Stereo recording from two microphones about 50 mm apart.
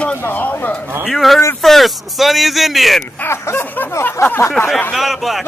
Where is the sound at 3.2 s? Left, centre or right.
Left.